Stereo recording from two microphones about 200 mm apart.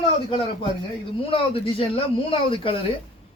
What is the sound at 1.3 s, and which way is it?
Speech, 25° left (ahead or behind).